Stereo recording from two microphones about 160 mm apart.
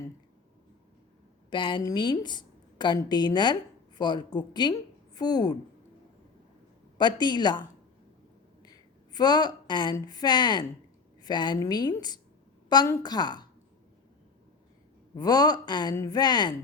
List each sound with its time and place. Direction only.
1.5 s a woman's voice: 30° left (ahead or behind)
7.0 s a woman's voice: 25° left (ahead or behind)
9.1 s a woman's voice: 25° left (ahead or behind)
15.1 s a woman's voice: 25° left (ahead or behind)